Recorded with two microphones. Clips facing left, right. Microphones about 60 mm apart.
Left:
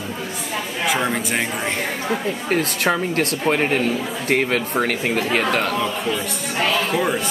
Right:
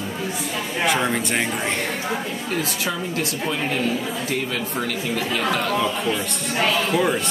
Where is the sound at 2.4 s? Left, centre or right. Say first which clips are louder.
Left 7 dB; left.